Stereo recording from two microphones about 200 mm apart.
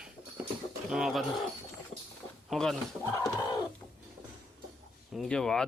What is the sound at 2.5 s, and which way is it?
Speech, centre (ahead or behind).